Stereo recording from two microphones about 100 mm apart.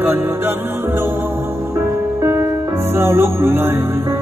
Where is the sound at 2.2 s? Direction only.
25° right (ahead or behind).